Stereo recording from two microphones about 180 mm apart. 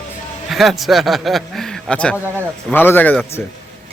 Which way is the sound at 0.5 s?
Centre (ahead or behind).